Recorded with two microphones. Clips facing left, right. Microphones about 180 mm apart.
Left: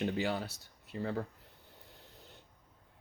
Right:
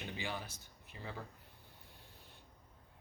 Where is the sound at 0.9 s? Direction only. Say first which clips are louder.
Left 11 dB; 50° left (ahead or behind).